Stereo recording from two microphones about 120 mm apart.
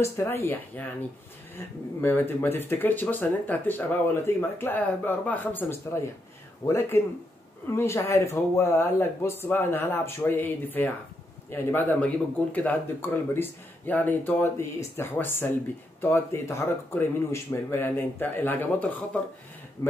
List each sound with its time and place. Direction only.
0.0 s speech: 20° left (ahead or behind)
2.0 s speech: 20° left (ahead or behind)
19.8 s speech: 25° left (ahead or behind)